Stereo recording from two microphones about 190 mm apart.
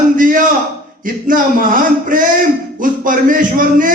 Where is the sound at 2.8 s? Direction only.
45° right (ahead or behind).